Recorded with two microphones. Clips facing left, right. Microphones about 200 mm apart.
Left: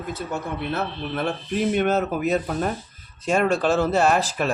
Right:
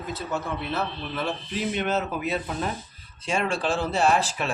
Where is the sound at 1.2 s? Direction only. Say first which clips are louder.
Left 5 dB; 55° left (ahead or behind).